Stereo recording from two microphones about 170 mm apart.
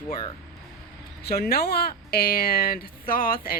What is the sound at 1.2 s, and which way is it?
Speech, 65° left (ahead or behind).